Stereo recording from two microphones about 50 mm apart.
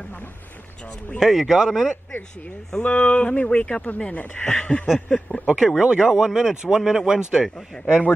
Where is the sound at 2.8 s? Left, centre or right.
Left.